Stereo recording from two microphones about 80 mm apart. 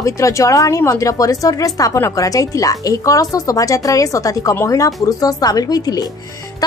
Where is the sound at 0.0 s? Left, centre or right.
Left.